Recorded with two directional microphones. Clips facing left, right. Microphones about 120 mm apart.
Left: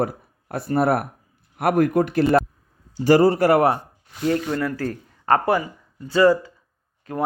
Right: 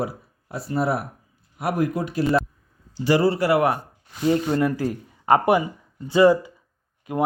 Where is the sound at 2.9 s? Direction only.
45° left (ahead or behind).